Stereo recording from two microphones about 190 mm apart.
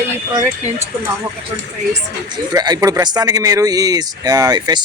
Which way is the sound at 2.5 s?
20° right (ahead or behind).